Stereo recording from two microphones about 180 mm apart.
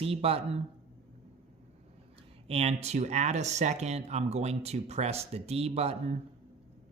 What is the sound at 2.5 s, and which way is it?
Speech, 35° right (ahead or behind).